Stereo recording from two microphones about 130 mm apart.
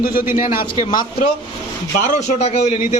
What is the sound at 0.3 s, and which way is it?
Speech, 90° left.